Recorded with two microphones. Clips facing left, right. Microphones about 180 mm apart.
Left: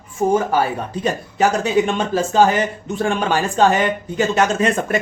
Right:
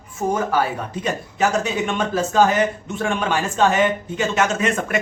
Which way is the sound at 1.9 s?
30° left (ahead or behind).